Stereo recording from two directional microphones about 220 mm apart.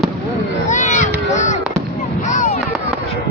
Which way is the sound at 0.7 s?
35° left (ahead or behind).